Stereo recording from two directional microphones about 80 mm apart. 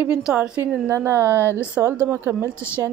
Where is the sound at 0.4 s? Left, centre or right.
Right.